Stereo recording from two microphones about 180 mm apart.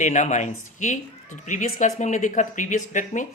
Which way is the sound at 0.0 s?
40° left (ahead or behind).